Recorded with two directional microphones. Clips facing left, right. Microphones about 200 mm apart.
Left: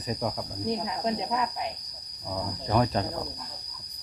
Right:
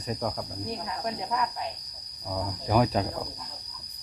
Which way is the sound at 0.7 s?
20° left (ahead or behind).